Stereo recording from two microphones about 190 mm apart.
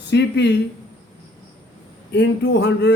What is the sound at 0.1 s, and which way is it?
Speech, 60° left (ahead or behind).